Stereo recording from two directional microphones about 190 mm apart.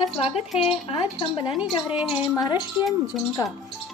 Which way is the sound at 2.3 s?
20° left (ahead or behind).